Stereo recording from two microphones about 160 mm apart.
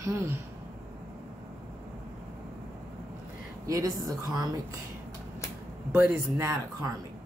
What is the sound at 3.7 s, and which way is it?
Speech, 20° right (ahead or behind).